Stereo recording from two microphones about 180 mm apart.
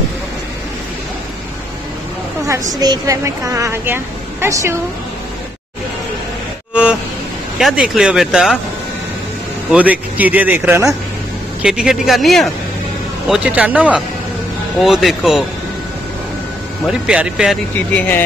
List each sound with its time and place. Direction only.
2.8 s a woman's voice: 20° right (ahead or behind)
6.7 s vehicle: 5° right (ahead or behind)
7.5 s speech: 5° right (ahead or behind)
9.7 s a woman's voice: 10° right (ahead or behind)
16.8 s speech: 5° right (ahead or behind)
17.9 s speech: 10° left (ahead or behind)